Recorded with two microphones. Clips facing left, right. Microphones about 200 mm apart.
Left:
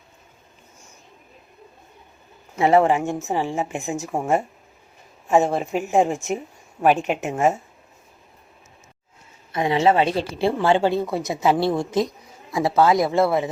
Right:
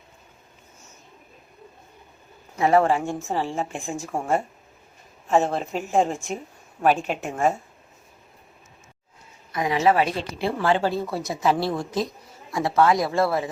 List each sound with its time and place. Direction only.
2.6 s a woman's voice: 25° left (ahead or behind)
9.5 s a woman's voice: 25° left (ahead or behind)
11.9 s speech: centre (ahead or behind)
12.5 s a woman's voice: 25° left (ahead or behind)